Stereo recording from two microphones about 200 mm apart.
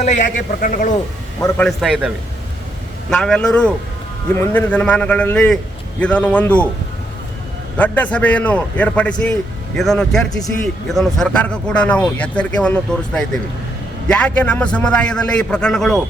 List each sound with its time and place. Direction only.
0.0 s a man's voice: 35° left (ahead or behind)
1.4 s a man's voice: 15° left (ahead or behind)
1.6 s a man's voice: centre (ahead or behind)
7.8 s a man's voice: 10° left (ahead or behind)